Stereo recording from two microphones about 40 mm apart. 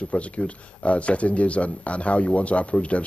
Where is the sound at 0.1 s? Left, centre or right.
Left.